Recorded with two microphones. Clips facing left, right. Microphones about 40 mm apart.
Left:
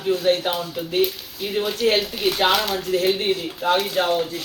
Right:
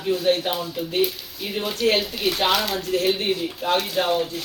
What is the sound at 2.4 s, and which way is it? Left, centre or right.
Speech, centre.